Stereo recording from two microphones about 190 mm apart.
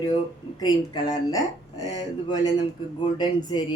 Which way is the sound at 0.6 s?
20° left (ahead or behind).